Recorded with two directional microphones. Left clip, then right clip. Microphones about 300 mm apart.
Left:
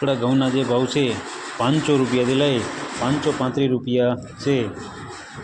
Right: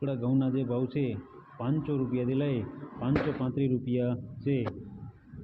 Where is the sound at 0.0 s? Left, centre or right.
Centre.